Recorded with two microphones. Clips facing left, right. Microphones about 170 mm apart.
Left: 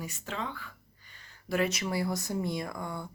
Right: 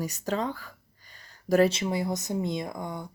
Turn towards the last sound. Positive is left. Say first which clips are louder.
# right 2 dB
turn(degrees=-20)  # may be behind; listen again after turning